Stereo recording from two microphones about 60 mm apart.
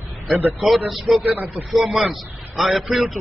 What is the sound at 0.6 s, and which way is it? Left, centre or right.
Speech, centre.